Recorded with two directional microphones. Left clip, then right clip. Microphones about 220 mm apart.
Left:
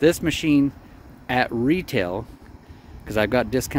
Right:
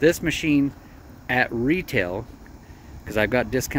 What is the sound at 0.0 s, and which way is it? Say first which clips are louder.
Speech: left 1 dB; 20° left (ahead or behind).